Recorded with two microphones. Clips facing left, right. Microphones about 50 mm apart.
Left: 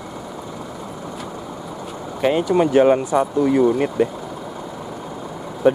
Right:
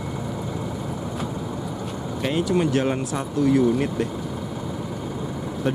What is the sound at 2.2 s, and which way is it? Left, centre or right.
Speech, centre.